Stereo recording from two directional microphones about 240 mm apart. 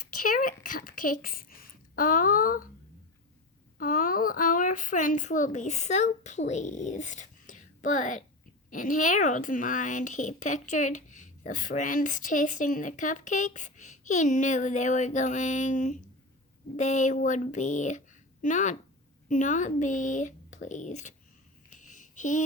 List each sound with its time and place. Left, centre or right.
0.3 s speech: left
3.8 s speech: left
21.7 s a sound: left